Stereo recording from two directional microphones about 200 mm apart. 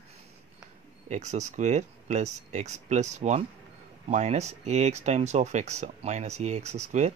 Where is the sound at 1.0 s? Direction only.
35° right (ahead or behind).